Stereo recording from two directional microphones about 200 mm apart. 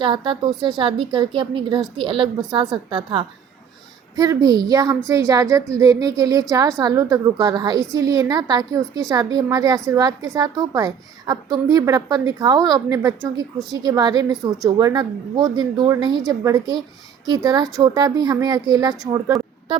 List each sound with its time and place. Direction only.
0.0 s a woman's voice: 25° right (ahead or behind)